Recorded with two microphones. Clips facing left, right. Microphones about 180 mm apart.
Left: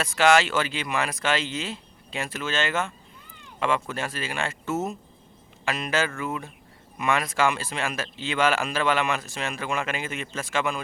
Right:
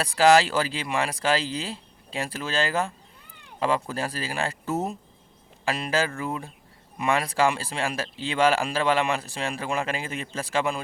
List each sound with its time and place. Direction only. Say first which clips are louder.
0.0 s speech: right 2 dB; 35° right (ahead or behind)